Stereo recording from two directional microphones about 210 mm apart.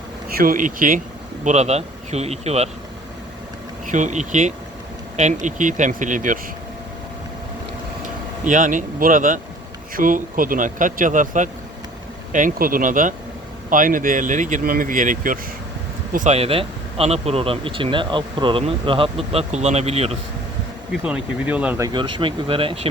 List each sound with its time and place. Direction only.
0.3 s speech: 40° right (ahead or behind)
3.9 s speech: 35° right (ahead or behind)
8.4 s speech: 40° right (ahead or behind)
21.0 s speech: 5° right (ahead or behind); by 22.9 s 25° right (ahead or behind)